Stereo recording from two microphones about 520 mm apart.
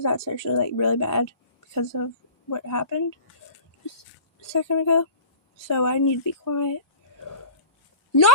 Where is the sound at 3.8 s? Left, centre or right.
Left.